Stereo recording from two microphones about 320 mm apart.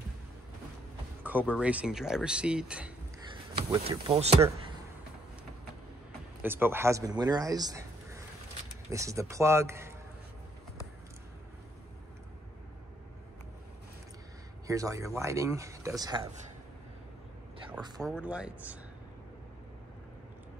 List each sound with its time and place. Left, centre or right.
1.2 s music: centre
1.5 s speech: centre
3.5 s speech: centre
6.4 s speech: centre
14.7 s speech: centre
18.0 s speech: centre